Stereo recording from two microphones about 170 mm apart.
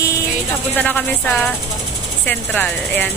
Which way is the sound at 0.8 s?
10° left (ahead or behind).